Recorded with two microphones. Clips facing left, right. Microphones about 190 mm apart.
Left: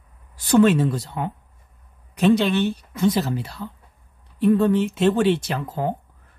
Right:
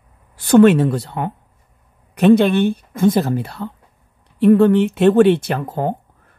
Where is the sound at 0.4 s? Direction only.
60° right (ahead or behind).